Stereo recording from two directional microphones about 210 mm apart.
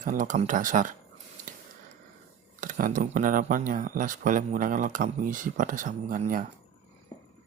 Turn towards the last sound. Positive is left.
turn(degrees=-40)  # may be behind; listen again after turning